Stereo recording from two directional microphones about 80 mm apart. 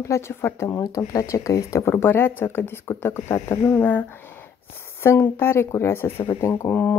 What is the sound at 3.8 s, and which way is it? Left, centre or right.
Speech, left.